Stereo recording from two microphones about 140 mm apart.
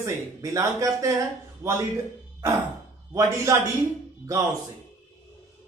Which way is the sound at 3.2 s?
20° right (ahead or behind).